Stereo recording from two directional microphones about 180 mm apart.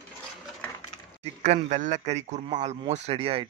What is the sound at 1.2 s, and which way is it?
Speech, 35° right (ahead or behind).